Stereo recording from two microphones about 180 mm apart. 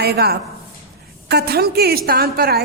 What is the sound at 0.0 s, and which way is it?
A woman's voice, 60° right (ahead or behind).